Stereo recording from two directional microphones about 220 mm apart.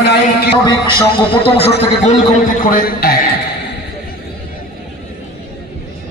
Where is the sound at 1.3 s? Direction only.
25° left (ahead or behind).